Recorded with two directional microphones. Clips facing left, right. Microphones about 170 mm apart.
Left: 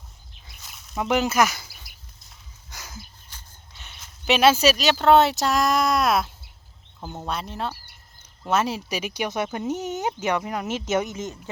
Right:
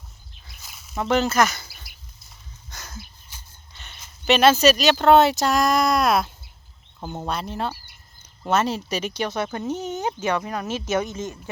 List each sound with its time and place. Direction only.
0.5 s a sound: centre (ahead or behind)
0.9 s speech: 15° left (ahead or behind)
3.7 s speech: centre (ahead or behind)
7.0 s speech: 10° right (ahead or behind)
7.3 s speech: centre (ahead or behind); by 11.3 s 20° left (ahead or behind)